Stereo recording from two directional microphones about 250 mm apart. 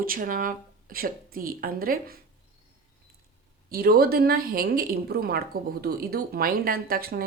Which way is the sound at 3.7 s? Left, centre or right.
Right.